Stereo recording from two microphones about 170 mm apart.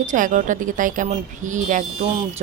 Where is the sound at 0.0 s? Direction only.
50° right (ahead or behind).